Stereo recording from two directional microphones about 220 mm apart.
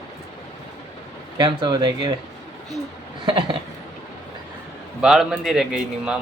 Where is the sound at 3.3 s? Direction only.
20° right (ahead or behind).